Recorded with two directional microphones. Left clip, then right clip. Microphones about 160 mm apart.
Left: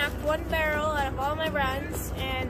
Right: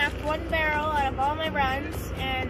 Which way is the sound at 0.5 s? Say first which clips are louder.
Right 4 dB; 20° left (ahead or behind).